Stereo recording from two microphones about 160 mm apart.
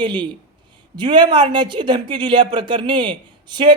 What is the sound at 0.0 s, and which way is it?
A man's voice, 30° right (ahead or behind).